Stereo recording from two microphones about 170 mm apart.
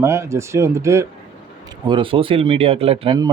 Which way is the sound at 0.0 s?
15° right (ahead or behind).